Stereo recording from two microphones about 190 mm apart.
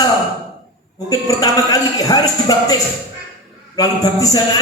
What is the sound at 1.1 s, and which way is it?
A woman's voice, 20° left (ahead or behind).